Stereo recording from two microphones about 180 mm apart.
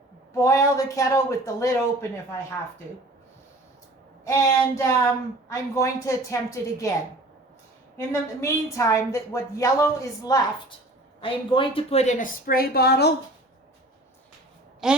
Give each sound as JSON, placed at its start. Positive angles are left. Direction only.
{"t": 0.3, "sound": "a woman's voice", "side_deg": 15}
{"t": 4.2, "sound": "a woman's voice", "side_deg": 15}
{"t": 7.9, "sound": "a woman's voice", "side_deg": 15}
{"t": 12.5, "sound": "a woman's voice", "side_deg": 60}
{"t": 14.8, "sound": "a sound", "side_deg": -5}